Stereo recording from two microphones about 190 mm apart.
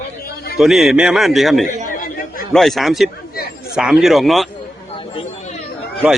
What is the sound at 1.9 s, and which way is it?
Chatter, 45° left (ahead or behind).